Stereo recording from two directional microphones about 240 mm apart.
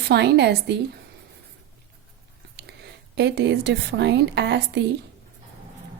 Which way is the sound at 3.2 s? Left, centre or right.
Right.